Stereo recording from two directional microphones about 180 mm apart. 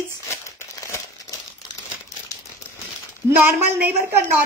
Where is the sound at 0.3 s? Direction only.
15° left (ahead or behind).